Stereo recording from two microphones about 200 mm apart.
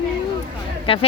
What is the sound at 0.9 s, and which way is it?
Speech, 30° left (ahead or behind).